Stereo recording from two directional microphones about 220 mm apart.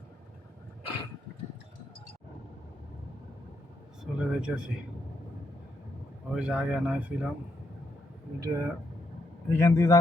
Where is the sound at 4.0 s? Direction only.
Centre (ahead or behind).